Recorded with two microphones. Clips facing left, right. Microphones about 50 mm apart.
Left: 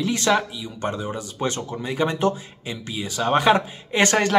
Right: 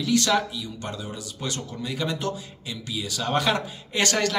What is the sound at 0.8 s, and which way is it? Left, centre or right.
Speech, left.